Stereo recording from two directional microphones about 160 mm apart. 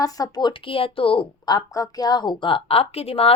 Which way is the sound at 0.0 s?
25° left (ahead or behind).